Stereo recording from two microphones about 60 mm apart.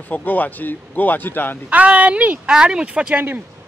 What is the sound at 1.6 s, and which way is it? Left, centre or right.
Speech, right.